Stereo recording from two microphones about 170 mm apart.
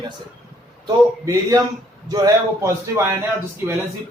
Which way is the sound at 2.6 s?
15° right (ahead or behind).